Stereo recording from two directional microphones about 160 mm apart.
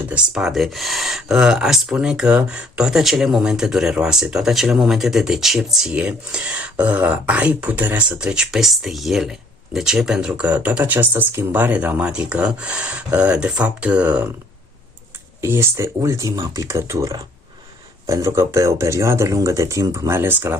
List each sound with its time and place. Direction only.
0.1 s speech: 5° right (ahead or behind)
15.4 s speech: 15° right (ahead or behind)